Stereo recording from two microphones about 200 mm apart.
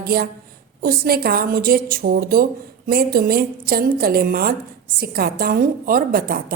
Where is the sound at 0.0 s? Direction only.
50° right (ahead or behind).